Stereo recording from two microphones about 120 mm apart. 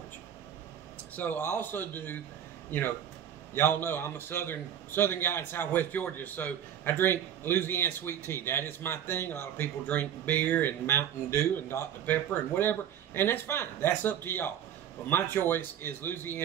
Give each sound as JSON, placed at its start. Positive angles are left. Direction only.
{"t": 1.1, "sound": "a man's voice", "side_deg": 15}
{"t": 3.5, "sound": "a man's voice", "side_deg": 20}